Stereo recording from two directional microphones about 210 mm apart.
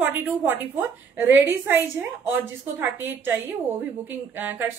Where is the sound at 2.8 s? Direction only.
10° right (ahead or behind).